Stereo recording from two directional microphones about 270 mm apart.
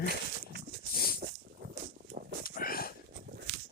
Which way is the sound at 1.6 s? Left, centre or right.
Right.